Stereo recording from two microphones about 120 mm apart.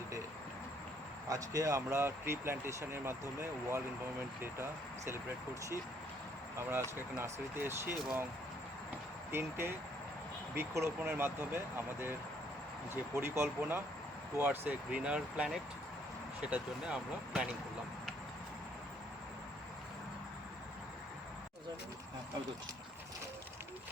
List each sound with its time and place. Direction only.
1.3 s speech: 30° right (ahead or behind)
6.6 s speech: 20° right (ahead or behind)
9.3 s speech: 20° right (ahead or behind)
13.1 s speech: 20° right (ahead or behind)